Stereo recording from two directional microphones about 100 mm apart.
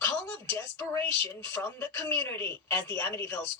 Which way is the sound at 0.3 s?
25° left (ahead or behind).